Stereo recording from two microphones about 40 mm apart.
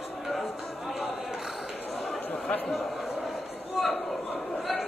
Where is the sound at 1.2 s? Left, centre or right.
Centre.